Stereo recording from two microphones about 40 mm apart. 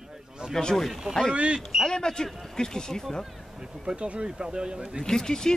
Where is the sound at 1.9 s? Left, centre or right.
Centre.